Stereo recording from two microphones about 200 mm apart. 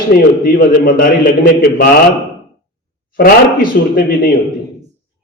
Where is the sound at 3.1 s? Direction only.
45° left (ahead or behind).